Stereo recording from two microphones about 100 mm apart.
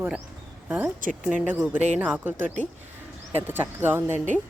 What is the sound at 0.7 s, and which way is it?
A woman's voice, 15° right (ahead or behind).